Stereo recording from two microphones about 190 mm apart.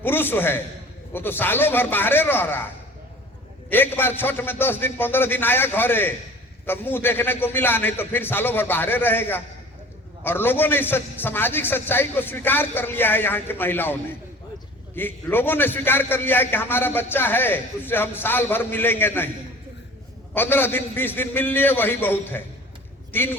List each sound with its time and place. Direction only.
0.0 s a man's voice: 10° left (ahead or behind)
3.7 s a man's voice: 10° left (ahead or behind)
20.3 s a man's voice: 10° left (ahead or behind)